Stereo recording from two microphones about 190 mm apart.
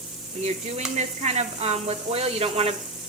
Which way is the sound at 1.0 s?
35° right (ahead or behind).